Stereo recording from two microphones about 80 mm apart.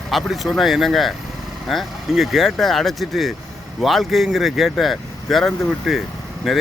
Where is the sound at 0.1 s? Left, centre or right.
Centre.